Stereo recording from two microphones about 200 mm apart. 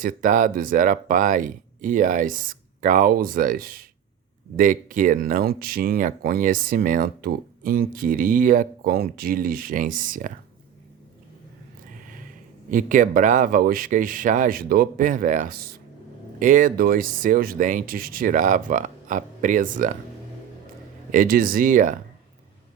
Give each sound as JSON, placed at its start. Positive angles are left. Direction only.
{"t": 0.0, "sound": "speech", "side_deg": -40}
{"t": 12.7, "sound": "speech", "side_deg": -40}
{"t": 21.1, "sound": "speech", "side_deg": -45}